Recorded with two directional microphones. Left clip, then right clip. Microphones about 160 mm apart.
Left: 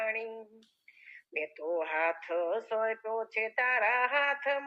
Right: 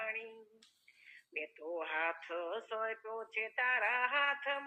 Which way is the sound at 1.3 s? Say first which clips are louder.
Left 8 dB; 40° left (ahead or behind).